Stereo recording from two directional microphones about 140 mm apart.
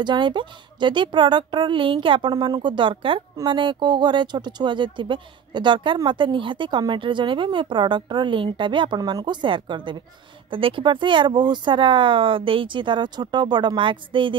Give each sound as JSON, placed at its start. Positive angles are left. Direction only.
{"t": 0.0, "sound": "speech", "side_deg": -35}